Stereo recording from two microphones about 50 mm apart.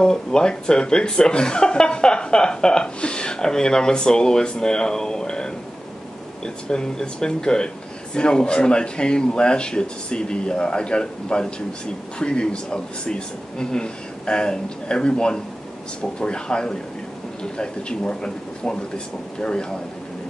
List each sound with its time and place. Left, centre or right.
0.0 s speech: centre